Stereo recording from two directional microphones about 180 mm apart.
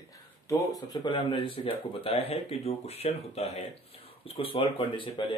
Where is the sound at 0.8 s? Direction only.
25° left (ahead or behind).